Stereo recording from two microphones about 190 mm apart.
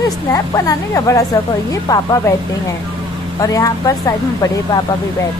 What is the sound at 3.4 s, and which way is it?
Speech, 20° left (ahead or behind).